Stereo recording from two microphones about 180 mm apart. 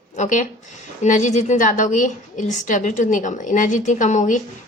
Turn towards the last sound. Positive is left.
turn(degrees=40)  # may be behind; listen again after turning